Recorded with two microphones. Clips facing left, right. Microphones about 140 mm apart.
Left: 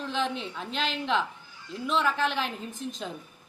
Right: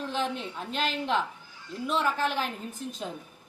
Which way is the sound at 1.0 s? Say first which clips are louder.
Left 1 dB; 5° right (ahead or behind).